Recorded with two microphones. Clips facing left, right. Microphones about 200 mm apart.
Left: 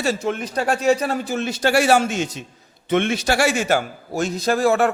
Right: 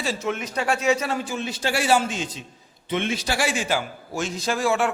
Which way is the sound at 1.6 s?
70° left (ahead or behind).